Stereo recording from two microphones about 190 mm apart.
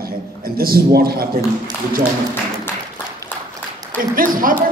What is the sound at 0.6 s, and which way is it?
Speech, 55° right (ahead or behind).